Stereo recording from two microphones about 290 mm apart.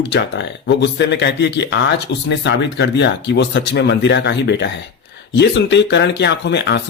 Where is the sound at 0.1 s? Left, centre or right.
Left.